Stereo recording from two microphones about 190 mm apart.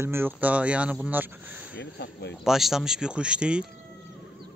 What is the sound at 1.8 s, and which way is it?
Speech, 65° left (ahead or behind).